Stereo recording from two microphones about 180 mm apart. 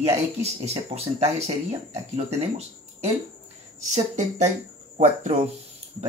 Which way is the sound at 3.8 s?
40° right (ahead or behind).